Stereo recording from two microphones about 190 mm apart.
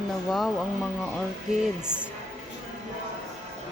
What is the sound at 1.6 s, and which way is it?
Speech, 5° right (ahead or behind).